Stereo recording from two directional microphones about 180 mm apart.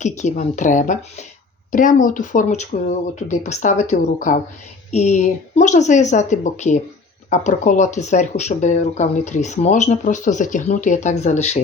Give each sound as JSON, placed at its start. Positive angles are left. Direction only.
{"t": 0.0, "sound": "speech", "side_deg": 40}